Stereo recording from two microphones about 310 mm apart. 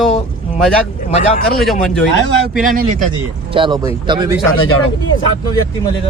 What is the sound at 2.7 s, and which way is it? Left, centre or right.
Speech, right.